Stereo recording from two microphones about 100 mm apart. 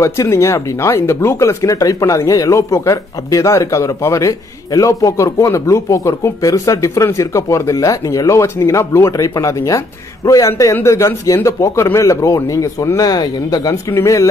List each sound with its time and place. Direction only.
0.0 s speech: 30° left (ahead or behind)